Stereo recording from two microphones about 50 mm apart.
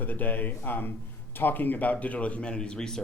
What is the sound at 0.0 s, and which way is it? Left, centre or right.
Speech, left.